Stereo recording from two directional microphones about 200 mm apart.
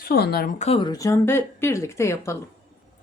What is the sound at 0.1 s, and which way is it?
Speech, 50° left (ahead or behind).